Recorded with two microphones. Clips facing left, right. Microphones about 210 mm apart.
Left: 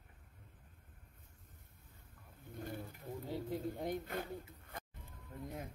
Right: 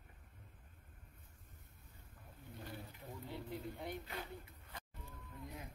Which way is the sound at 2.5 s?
50° left (ahead or behind).